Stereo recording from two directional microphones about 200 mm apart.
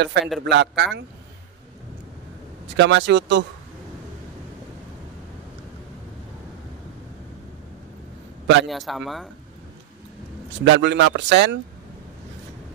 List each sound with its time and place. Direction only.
0.0 s speech: 60° right (ahead or behind)
2.7 s speech: 65° right (ahead or behind)
8.6 s speech: centre (ahead or behind)
10.6 s speech: 60° right (ahead or behind)